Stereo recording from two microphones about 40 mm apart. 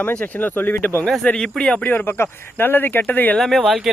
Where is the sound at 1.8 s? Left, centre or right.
Left.